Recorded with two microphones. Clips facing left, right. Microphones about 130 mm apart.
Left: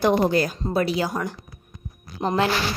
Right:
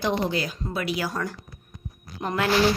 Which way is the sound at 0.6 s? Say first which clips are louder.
Left 5 dB; 30° left (ahead or behind).